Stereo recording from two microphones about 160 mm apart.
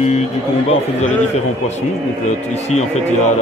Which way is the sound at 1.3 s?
45° left (ahead or behind).